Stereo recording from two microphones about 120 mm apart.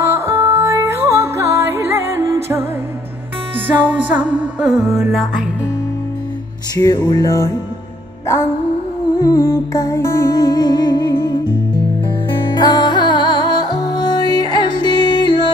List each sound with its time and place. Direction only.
0.1 s music: 25° right (ahead or behind)
3.6 s music: 15° right (ahead or behind)
6.7 s music: 25° left (ahead or behind)
9.2 s music: 25° left (ahead or behind); by 15.5 s 45° left (ahead or behind)